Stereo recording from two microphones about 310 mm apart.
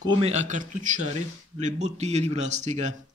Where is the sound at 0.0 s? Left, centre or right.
Centre.